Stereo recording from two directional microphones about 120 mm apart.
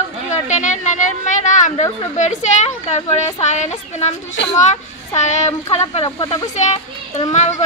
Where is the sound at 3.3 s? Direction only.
70° left (ahead or behind).